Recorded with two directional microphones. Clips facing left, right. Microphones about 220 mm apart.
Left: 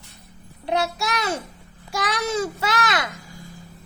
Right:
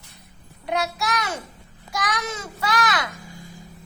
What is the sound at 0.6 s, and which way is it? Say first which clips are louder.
A child's voice: left 2 dB; 25° left (ahead or behind).